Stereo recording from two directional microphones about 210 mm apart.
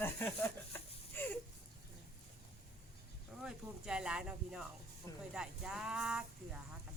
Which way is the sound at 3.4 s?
5° right (ahead or behind).